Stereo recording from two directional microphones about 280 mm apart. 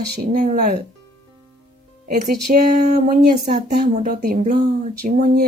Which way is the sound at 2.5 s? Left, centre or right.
Right.